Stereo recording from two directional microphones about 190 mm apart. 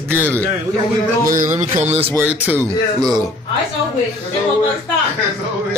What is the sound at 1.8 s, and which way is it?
Speech, 35° right (ahead or behind).